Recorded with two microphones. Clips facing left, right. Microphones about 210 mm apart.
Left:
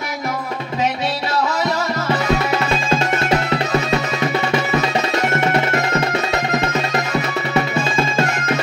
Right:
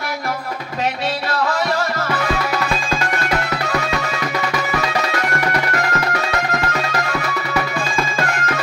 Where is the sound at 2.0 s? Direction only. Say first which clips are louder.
Left 3 dB; 25° left (ahead or behind).